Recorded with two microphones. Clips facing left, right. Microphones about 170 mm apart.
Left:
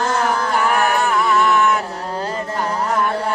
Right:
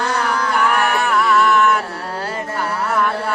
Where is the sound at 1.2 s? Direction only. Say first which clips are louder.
Right 4 dB; 20° left (ahead or behind).